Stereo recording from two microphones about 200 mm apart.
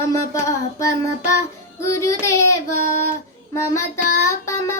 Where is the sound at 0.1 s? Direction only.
15° left (ahead or behind).